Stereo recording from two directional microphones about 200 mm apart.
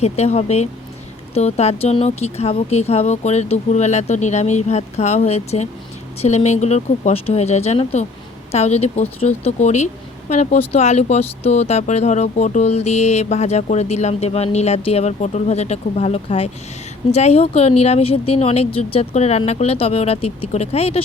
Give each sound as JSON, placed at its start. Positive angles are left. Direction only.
{"t": 0.0, "sound": "a woman's voice", "side_deg": 30}